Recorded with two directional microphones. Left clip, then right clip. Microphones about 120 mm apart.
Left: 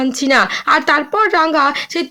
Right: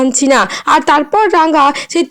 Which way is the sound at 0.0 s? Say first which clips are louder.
Right 3 dB; 45° right (ahead or behind).